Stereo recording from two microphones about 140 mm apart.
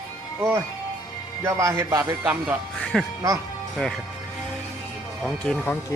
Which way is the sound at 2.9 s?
5° left (ahead or behind).